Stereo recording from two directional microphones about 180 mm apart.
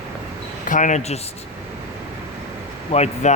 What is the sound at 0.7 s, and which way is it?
Speech, 45° left (ahead or behind).